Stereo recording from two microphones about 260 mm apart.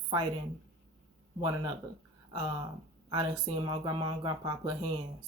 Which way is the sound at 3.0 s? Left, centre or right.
Centre.